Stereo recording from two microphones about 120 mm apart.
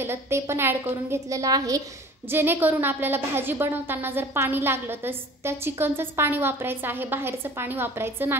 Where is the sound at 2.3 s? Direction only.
20° right (ahead or behind).